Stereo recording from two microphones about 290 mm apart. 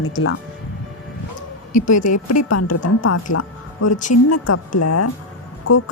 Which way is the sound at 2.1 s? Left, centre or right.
Left.